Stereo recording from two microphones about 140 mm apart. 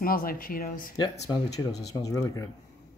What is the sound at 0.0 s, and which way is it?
Speech, 90° left.